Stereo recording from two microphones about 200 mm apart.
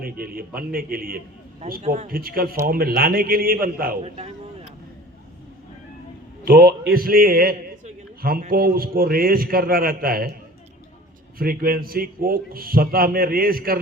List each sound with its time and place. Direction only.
0.0 s a man's voice: 45° right (ahead or behind)
4.0 s speech: 30° right (ahead or behind)
6.4 s a man's voice: 50° right (ahead or behind)
11.3 s a man's voice: 45° right (ahead or behind)